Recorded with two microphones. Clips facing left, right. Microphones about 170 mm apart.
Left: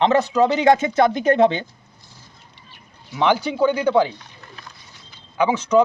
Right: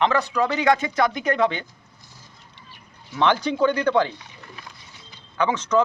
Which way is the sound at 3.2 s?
10° left (ahead or behind).